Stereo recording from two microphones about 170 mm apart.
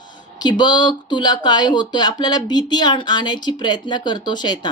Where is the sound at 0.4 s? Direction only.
25° left (ahead or behind).